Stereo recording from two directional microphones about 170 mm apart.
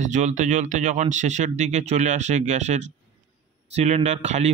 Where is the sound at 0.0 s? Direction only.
45° right (ahead or behind).